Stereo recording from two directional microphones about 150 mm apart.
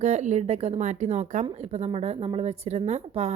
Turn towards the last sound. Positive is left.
turn(degrees=-45)  # may be behind; listen again after turning